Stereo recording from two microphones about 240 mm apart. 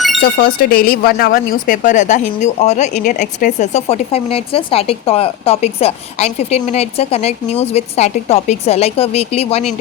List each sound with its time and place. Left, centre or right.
0.6 s a woman's voice: left